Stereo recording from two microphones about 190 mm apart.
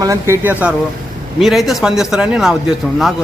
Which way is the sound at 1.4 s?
Centre (ahead or behind).